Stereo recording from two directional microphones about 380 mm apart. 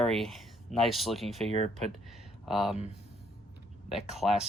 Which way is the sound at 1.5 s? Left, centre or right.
Centre.